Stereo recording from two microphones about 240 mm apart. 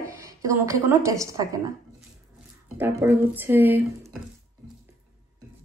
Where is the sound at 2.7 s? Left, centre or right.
Centre.